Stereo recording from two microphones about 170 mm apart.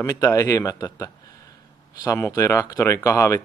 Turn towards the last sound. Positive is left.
turn(degrees=15)  # may be behind; listen again after turning